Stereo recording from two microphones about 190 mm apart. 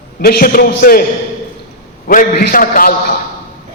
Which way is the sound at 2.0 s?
50° left (ahead or behind).